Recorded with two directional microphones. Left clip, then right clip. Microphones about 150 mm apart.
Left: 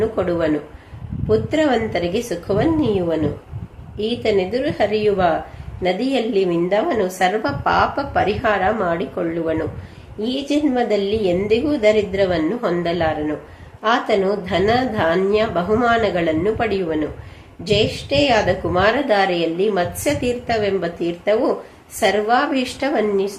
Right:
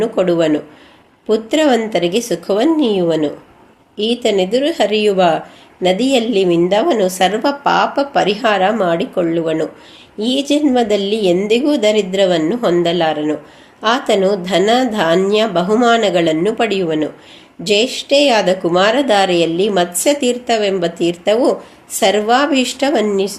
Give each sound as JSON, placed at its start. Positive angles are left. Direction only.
{"t": 0.0, "sound": "a woman's voice", "side_deg": -45}